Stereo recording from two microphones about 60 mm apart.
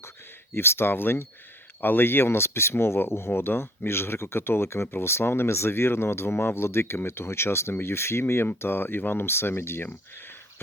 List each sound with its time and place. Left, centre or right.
0.5 s speech: left